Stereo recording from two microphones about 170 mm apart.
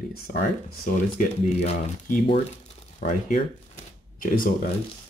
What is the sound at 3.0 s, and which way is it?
Shuffling cards, 45° left (ahead or behind).